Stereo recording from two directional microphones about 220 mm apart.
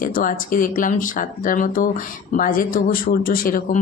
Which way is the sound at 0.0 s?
40° left (ahead or behind).